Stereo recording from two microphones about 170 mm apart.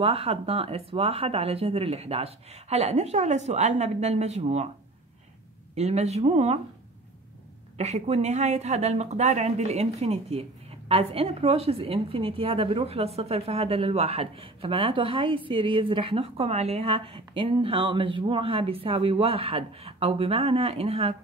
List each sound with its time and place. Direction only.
0.0 s a woman's voice: 35° right (ahead or behind)
5.8 s a woman's voice: 40° right (ahead or behind)
7.7 s a woman's voice: 40° right (ahead or behind)